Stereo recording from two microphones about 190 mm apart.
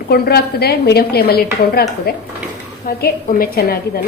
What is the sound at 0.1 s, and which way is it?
A woman's voice, 55° left (ahead or behind).